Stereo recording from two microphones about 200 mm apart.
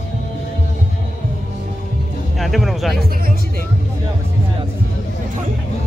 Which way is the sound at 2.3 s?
Centre (ahead or behind).